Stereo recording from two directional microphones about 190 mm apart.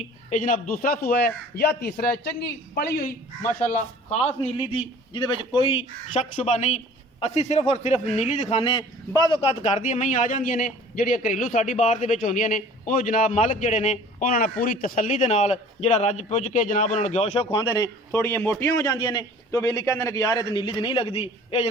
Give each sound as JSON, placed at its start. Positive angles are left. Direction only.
{"t": 0.0, "sound": "speech", "side_deg": 40}
{"t": 3.6, "sound": "a man's voice", "side_deg": 40}